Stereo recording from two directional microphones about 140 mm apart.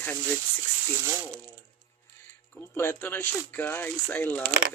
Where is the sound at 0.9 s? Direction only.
15° right (ahead or behind).